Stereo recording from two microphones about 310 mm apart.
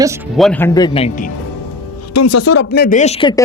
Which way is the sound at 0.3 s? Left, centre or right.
Centre.